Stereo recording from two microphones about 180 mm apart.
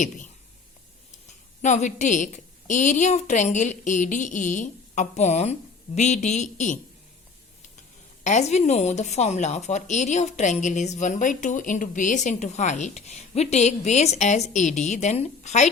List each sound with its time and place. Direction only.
1.3 s a woman's voice: 40° left (ahead or behind)
8.2 s a woman's voice: 40° left (ahead or behind)